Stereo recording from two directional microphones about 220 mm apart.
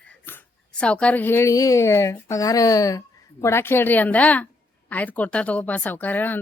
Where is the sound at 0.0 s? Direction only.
5° left (ahead or behind).